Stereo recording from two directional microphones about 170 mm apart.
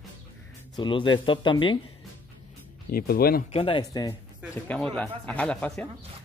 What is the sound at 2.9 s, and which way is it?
Speech, 60° left (ahead or behind).